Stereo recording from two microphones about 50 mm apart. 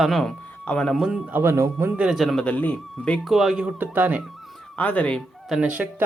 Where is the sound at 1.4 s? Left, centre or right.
Right.